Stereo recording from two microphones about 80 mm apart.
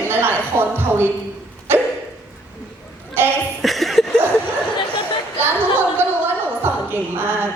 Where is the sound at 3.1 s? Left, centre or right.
Right.